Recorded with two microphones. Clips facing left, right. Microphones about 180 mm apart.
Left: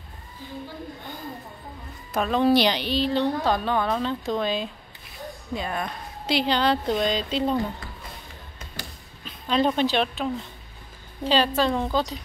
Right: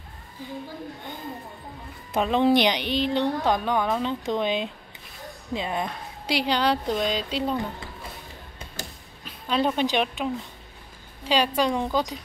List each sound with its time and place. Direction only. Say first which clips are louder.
2.1 s a woman's voice: even; 20° right (ahead or behind)
9.2 s a woman's voice: left 2 dB; 5° right (ahead or behind)